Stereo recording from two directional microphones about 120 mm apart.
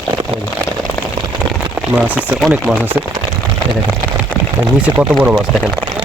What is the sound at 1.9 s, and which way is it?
Speech, 15° right (ahead or behind).